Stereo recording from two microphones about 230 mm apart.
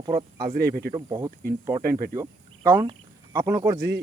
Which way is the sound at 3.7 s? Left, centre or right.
Right.